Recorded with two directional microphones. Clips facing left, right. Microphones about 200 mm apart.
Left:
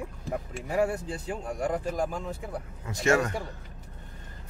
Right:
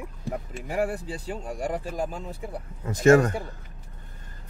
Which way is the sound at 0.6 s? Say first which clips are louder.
Left 1 dB; 5° right (ahead or behind).